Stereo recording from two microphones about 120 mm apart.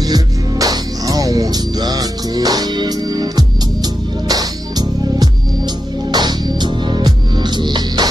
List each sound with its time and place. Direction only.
0.0 s music: 30° right (ahead or behind)